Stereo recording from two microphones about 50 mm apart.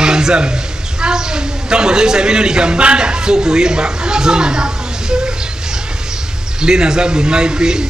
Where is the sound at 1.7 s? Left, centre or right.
Centre.